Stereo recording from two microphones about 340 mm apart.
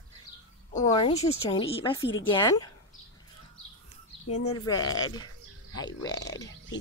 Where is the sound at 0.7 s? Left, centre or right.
Centre.